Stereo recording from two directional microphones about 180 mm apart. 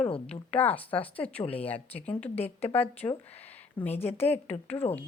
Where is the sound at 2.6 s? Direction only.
10° left (ahead or behind).